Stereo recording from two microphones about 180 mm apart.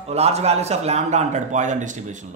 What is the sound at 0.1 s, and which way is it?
A man's voice, 35° right (ahead or behind).